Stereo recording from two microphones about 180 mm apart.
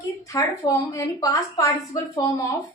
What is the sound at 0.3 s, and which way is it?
A woman's voice, 15° left (ahead or behind).